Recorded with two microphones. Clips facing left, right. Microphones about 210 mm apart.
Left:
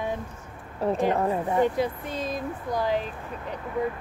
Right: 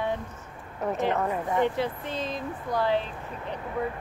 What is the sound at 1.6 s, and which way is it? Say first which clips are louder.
Speech: left 2 dB; 10° left (ahead or behind).